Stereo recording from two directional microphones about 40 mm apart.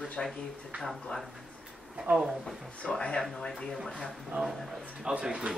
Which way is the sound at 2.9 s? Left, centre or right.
Left.